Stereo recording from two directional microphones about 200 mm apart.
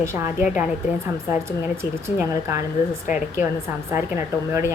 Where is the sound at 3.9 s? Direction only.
10° right (ahead or behind).